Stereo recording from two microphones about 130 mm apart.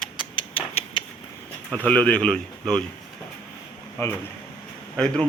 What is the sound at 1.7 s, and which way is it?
Speech, 10° left (ahead or behind).